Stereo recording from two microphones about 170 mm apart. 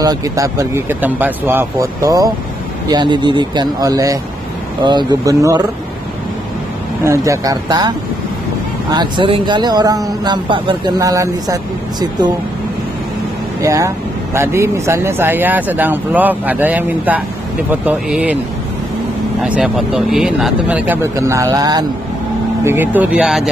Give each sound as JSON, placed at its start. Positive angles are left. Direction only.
{"t": 0.0, "sound": "a man's voice", "side_deg": -20}
{"t": 7.1, "sound": "a man's voice", "side_deg": -20}
{"t": 8.9, "sound": "a man's voice", "side_deg": -25}
{"t": 13.6, "sound": "speech", "side_deg": -20}
{"t": 19.4, "sound": "speech", "side_deg": -5}
{"t": 22.7, "sound": "speech", "side_deg": -10}